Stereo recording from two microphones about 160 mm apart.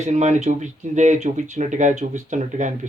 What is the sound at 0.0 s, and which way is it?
Speech, 45° right (ahead or behind).